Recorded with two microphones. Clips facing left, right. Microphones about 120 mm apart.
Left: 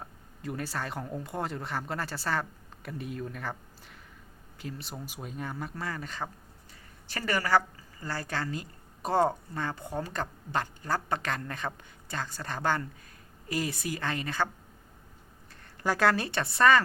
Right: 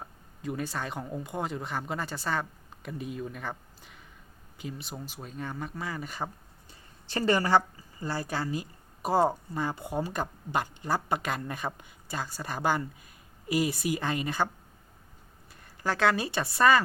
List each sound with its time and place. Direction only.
0.0 s speech: centre (ahead or behind)
7.1 s speech: 25° right (ahead or behind)
15.8 s speech: centre (ahead or behind)